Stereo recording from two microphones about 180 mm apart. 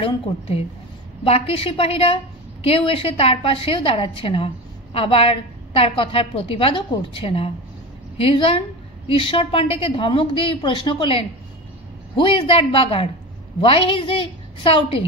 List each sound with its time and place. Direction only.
0.0 s a woman's voice: 30° left (ahead or behind)